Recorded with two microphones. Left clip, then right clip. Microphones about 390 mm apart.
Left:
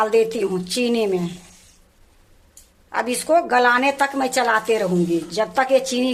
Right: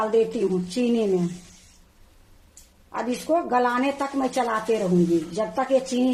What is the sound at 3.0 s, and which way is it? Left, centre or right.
A woman's voice, left.